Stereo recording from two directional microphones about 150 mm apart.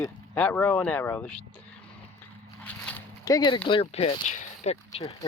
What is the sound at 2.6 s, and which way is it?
Biting, 10° left (ahead or behind).